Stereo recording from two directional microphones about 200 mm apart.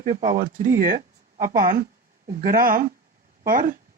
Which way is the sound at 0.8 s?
45° right (ahead or behind).